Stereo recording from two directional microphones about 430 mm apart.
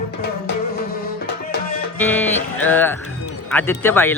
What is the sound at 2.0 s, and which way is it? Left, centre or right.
Music, centre.